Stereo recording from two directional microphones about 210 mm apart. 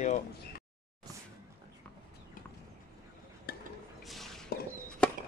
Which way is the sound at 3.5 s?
45° left (ahead or behind).